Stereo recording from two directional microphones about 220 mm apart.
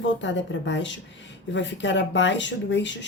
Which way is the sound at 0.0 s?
55° left (ahead or behind).